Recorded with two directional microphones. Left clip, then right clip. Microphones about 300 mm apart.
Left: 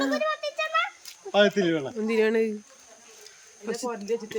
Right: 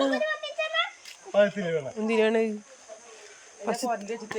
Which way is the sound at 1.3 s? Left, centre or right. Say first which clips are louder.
Left 2 dB; left.